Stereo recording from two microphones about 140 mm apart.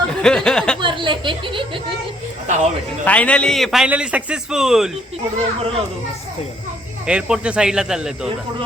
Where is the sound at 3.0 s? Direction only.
10° left (ahead or behind).